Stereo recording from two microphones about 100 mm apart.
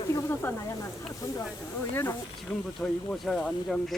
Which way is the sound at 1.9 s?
20° left (ahead or behind).